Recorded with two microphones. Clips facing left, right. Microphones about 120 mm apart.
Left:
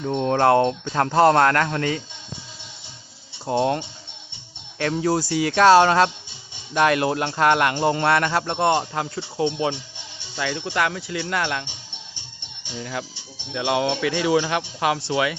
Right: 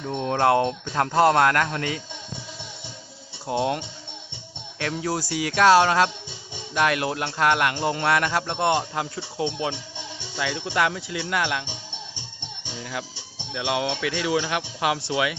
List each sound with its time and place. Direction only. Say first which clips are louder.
0.1 s speech: left 3 dB; centre (ahead or behind)
3.4 s speech: left 3 dB; centre (ahead or behind)